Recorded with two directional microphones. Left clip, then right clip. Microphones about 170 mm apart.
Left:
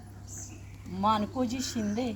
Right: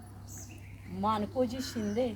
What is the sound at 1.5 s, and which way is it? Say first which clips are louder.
Speech: left 2 dB; 55° left (ahead or behind).